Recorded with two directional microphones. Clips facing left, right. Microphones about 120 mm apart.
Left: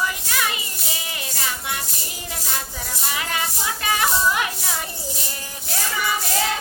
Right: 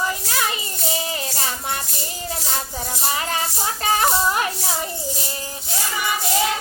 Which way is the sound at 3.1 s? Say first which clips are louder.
Right 3 dB; 35° right (ahead or behind).